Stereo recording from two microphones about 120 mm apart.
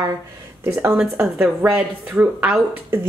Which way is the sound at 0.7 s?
20° right (ahead or behind).